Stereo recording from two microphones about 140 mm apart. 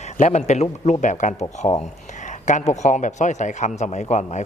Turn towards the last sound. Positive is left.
turn(degrees=55)  # may be behind; listen again after turning